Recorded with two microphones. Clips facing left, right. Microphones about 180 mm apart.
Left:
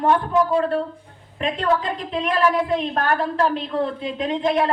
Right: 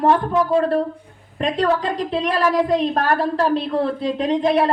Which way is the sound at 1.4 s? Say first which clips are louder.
Right 2 dB; 40° right (ahead or behind).